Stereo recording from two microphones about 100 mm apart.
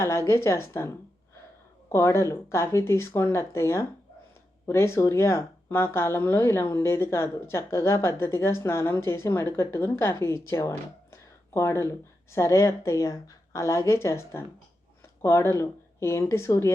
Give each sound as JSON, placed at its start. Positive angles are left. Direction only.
{"t": 0.0, "sound": "speech", "side_deg": 30}